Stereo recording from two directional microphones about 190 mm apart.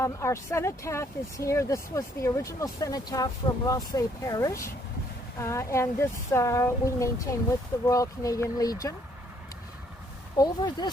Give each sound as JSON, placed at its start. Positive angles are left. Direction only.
{"t": 0.0, "sound": "speech", "side_deg": 15}
{"t": 10.3, "sound": "speech", "side_deg": 20}